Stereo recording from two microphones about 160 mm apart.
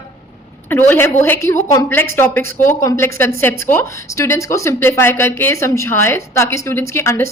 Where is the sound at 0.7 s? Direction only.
15° left (ahead or behind).